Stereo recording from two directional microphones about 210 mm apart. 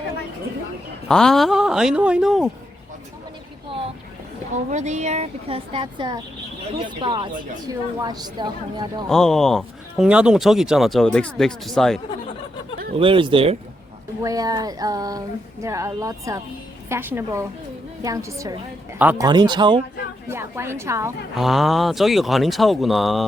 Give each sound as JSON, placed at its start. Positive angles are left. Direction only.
{"t": 1.0, "sound": "speech", "side_deg": 5}
{"t": 4.7, "sound": "speech", "side_deg": -35}
{"t": 9.0, "sound": "speech", "side_deg": 0}
{"t": 12.9, "sound": "a woman's voice", "side_deg": -25}
{"t": 21.3, "sound": "speech", "side_deg": 0}